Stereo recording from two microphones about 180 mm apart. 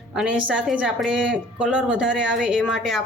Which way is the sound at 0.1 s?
5° right (ahead or behind).